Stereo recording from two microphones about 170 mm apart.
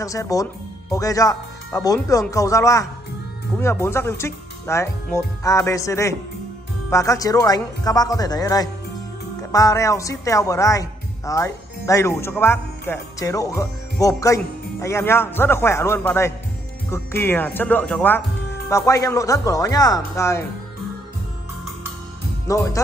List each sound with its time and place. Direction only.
0.0 s speech: 20° left (ahead or behind)
22.5 s speech: 20° left (ahead or behind)